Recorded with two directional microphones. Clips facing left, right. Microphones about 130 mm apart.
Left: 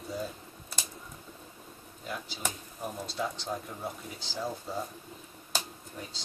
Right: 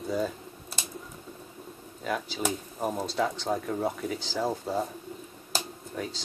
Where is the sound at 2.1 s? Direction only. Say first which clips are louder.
Right 8 dB; 90° right; by 4.8 s 75° right (ahead or behind).